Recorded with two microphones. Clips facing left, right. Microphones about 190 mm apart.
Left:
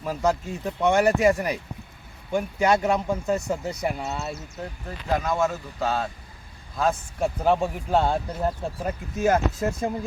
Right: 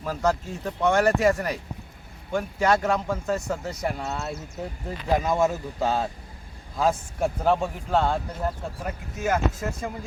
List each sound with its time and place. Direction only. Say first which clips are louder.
0.0 s speech: left 1 dB; 10° left (ahead or behind)
2.3 s speech: left 1 dB; 15° left (ahead or behind)
4.9 s speech: right 2 dB; 15° right (ahead or behind)
7.4 s speech: left 1 dB; centre (ahead or behind)
7.9 s speech: left 1 dB; 15° left (ahead or behind)
9.2 s speech: left 3 dB; 35° left (ahead or behind)